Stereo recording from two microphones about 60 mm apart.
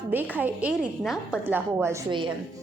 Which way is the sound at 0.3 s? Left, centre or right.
Right.